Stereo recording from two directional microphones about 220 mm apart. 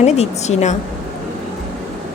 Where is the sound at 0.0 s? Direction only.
30° left (ahead or behind).